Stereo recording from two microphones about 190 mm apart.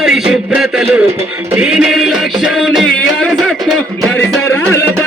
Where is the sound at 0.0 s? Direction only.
5° right (ahead or behind).